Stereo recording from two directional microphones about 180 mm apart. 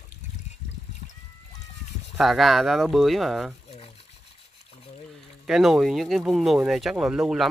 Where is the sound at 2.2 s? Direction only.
Centre (ahead or behind).